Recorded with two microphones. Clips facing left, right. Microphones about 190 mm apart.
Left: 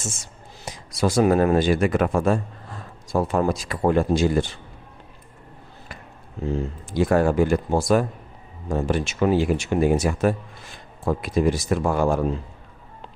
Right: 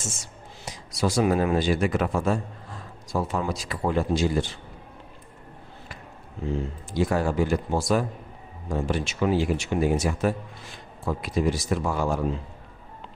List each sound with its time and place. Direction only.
0.6 s speech: 50° left (ahead or behind)
6.9 s speech: 55° left (ahead or behind)